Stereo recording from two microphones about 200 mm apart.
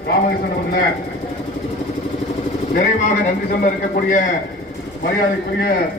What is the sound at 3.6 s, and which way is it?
A man's voice, 45° left (ahead or behind).